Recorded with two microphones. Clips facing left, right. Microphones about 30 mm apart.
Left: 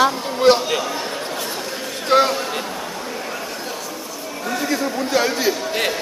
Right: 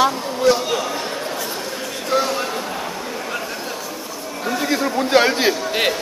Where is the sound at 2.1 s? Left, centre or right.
Left.